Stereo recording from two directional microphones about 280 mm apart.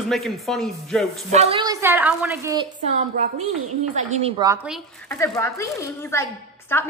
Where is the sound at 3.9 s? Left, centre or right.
Centre.